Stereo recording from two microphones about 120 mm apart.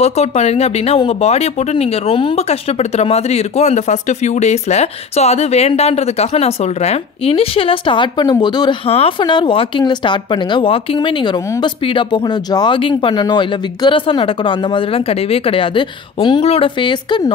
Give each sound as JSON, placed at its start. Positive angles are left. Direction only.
{"t": 0.0, "sound": "speech", "side_deg": 65}
{"t": 8.8, "sound": "speech", "side_deg": 50}